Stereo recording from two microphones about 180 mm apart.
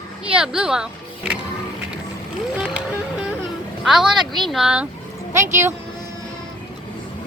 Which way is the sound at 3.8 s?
Centre (ahead or behind).